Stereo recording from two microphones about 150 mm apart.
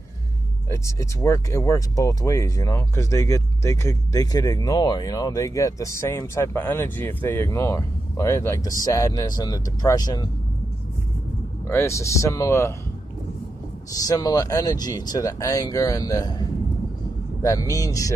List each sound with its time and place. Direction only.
0.7 s speech: 20° left (ahead or behind)
11.6 s speech: 20° left (ahead or behind)
14.0 s speech: 25° left (ahead or behind)